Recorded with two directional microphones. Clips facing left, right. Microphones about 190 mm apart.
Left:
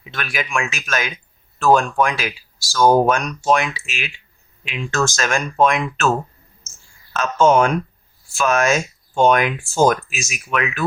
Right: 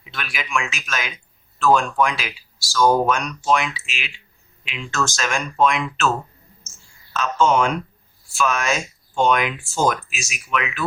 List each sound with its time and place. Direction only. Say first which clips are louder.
0.1 s speech: left 2 dB; 45° left (ahead or behind)
7.1 s speech: left 4 dB; 45° left (ahead or behind)